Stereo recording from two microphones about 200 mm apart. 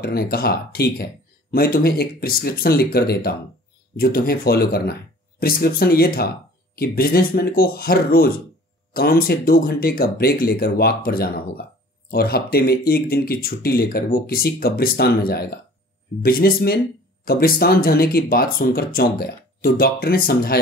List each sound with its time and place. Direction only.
0.0 s speech: 50° left (ahead or behind)